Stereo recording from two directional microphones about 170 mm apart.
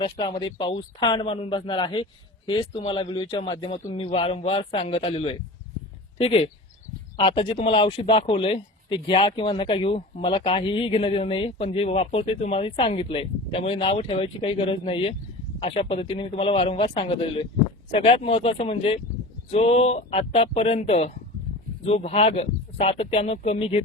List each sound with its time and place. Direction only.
0.0 s speech: 25° left (ahead or behind)